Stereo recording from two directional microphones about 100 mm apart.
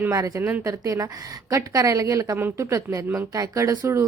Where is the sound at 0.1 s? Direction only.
30° right (ahead or behind).